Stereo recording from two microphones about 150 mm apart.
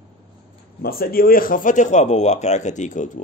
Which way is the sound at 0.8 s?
80° left.